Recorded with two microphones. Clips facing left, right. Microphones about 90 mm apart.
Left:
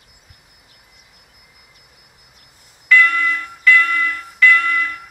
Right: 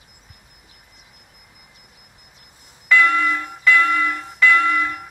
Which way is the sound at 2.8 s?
20° right (ahead or behind).